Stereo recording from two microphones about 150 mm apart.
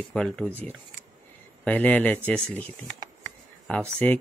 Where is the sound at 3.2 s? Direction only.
10° left (ahead or behind).